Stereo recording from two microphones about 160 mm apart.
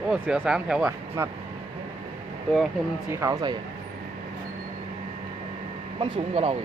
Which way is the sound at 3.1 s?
20° right (ahead or behind).